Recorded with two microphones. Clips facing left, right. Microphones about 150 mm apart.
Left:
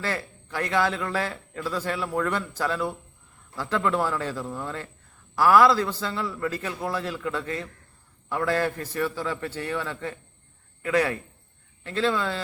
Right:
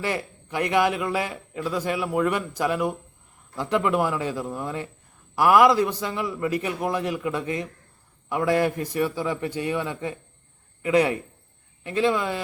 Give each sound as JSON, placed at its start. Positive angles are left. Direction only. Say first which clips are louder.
{"t": 0.0, "sound": "a man's voice", "louder": "right 3 dB", "side_deg": -15}